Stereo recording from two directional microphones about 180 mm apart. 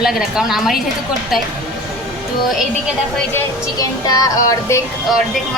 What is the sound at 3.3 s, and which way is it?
Speech, 20° left (ahead or behind).